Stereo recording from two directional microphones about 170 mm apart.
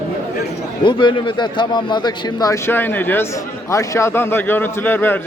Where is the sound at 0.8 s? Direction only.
30° left (ahead or behind).